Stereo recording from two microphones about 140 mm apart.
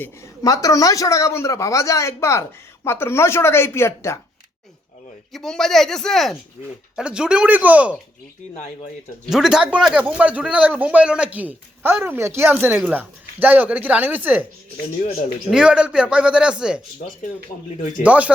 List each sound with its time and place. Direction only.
0.4 s speech: 25° left (ahead or behind)
5.3 s speech: 5° left (ahead or behind)
9.3 s speech: 5° right (ahead or behind)
15.4 s speech: 5° right (ahead or behind)
18.0 s speech: 10° right (ahead or behind)